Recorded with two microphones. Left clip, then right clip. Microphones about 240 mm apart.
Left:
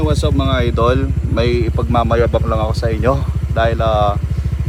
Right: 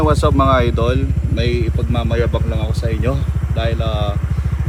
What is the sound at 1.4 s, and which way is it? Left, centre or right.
Speech, left.